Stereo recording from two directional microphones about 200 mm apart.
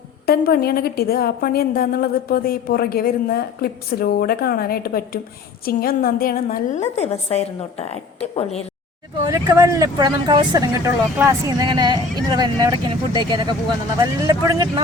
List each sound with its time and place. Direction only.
0.3 s a woman's voice: 50° left (ahead or behind); by 8.6 s 30° left (ahead or behind)
9.2 s speech: 15° right (ahead or behind)